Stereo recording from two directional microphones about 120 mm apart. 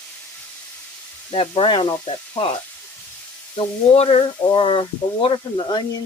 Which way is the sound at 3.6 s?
55° left (ahead or behind).